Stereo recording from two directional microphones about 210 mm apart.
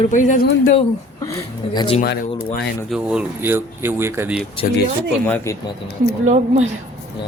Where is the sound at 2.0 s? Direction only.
50° left (ahead or behind).